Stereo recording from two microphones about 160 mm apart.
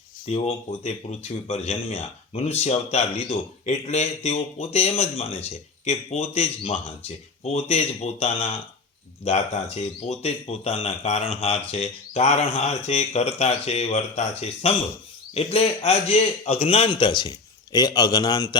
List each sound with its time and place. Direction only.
0.3 s speech: 40° left (ahead or behind); by 18.5 s 25° left (ahead or behind)